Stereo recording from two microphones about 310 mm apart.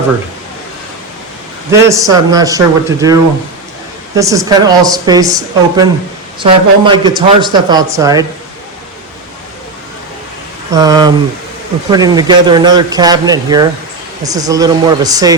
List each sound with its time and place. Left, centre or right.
1.7 s speech: centre
4.2 s speech: centre
10.7 s speech: centre